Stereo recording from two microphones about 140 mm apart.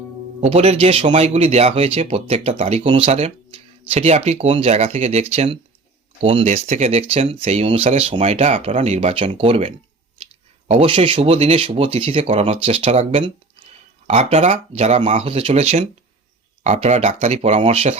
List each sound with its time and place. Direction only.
0.4 s speech: 45° right (ahead or behind)
10.8 s speech: 40° right (ahead or behind)
14.1 s speech: 50° right (ahead or behind)